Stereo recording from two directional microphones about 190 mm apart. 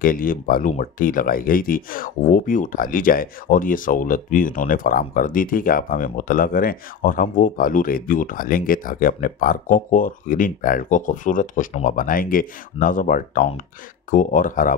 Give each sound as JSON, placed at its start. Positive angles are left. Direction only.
{"t": 0.0, "sound": "speech", "side_deg": 45}